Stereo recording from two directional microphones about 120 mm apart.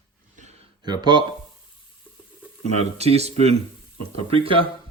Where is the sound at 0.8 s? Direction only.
35° right (ahead or behind).